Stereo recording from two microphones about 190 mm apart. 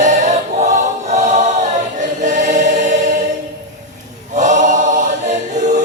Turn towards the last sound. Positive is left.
turn(degrees=-40)  # may be behind; listen again after turning